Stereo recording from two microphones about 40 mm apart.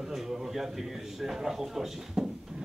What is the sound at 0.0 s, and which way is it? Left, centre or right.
Speech, centre.